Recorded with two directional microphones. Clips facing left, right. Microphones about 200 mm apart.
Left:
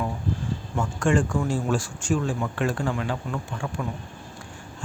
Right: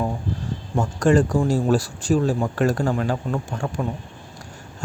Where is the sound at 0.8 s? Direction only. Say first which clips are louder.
Right 5 dB; 40° right (ahead or behind).